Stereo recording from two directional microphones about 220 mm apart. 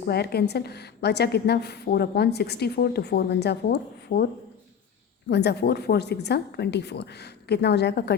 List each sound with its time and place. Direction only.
0.0 s a woman's voice: 45° left (ahead or behind)
5.3 s a woman's voice: 50° left (ahead or behind)